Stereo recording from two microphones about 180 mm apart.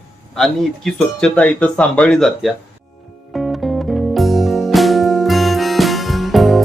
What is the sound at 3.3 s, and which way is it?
Music, centre (ahead or behind).